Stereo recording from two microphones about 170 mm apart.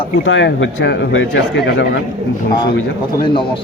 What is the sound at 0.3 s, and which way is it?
Speech, 90° left.